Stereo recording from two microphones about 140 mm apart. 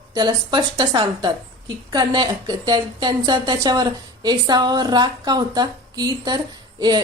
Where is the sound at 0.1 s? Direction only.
30° right (ahead or behind).